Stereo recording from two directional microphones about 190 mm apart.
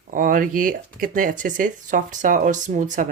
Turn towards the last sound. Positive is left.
turn(degrees=-40)  # may be behind; listen again after turning